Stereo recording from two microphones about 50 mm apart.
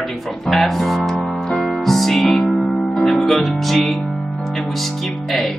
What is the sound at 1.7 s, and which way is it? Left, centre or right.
Music, centre.